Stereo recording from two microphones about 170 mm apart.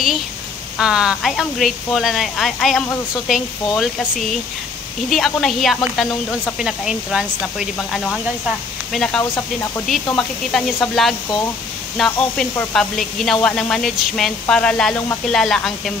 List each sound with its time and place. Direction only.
0.7 s speech: 5° right (ahead or behind)
9.3 s speech: 15° left (ahead or behind)
9.8 s speech: 5° left (ahead or behind)